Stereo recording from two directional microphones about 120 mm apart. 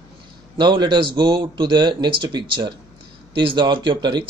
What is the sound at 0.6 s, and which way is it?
Speech, 40° right (ahead or behind).